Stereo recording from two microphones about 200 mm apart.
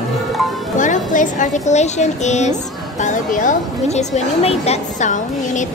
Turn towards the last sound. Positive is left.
turn(degrees=40)  # may be behind; listen again after turning